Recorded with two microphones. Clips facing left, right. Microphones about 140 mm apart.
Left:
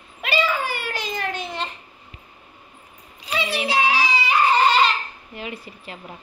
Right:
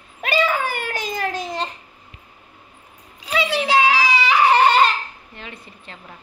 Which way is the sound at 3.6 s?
90° right.